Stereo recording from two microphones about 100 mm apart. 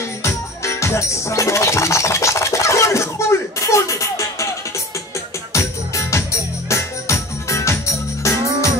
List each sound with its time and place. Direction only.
0.2 s music: 30° left (ahead or behind)
5.5 s music: 30° left (ahead or behind)